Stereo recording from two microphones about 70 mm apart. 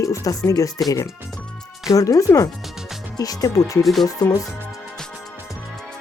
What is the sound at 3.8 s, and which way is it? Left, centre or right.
Speech, centre.